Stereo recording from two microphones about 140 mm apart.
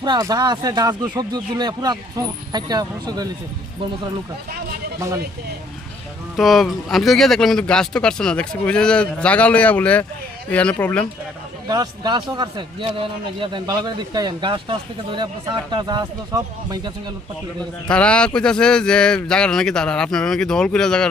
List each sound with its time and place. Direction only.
0.0 s speech: 30° right (ahead or behind)
4.9 s speech: 20° right (ahead or behind)
6.3 s speech: centre (ahead or behind)
11.7 s speech: 30° right (ahead or behind)
17.8 s speech: 10° left (ahead or behind)